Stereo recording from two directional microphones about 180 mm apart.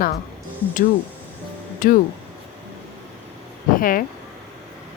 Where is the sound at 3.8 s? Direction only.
50° left (ahead or behind).